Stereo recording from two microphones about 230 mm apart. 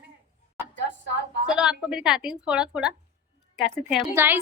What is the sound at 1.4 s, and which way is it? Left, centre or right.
A woman's voice, centre.